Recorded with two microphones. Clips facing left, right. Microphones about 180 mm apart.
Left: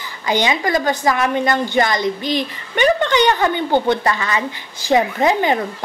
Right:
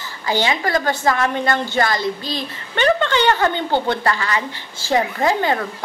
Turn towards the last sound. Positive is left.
turn(degrees=20)  # may be behind; listen again after turning